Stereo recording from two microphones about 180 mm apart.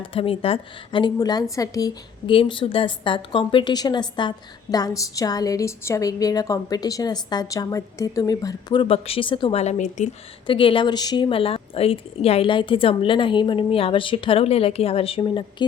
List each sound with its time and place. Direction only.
0.0 s a woman's voice: 30° left (ahead or behind)
10.4 s a woman's voice: 30° left (ahead or behind)